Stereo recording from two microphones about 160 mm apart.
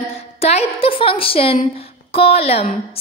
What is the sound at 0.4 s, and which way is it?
A woman's voice, 40° left (ahead or behind).